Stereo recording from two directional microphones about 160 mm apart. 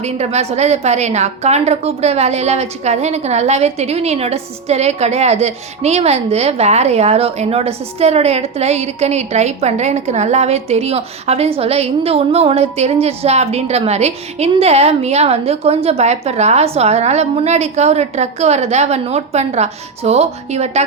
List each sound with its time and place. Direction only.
0.0 s a woman's voice: 40° right (ahead or behind)